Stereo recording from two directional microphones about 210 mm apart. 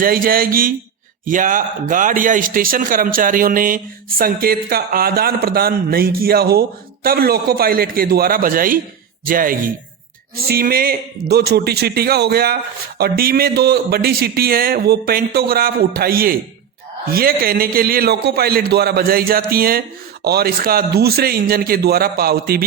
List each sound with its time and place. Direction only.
0.0 s a man's voice: 45° right (ahead or behind)